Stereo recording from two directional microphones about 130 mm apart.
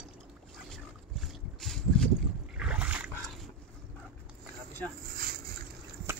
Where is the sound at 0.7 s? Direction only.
Centre (ahead or behind).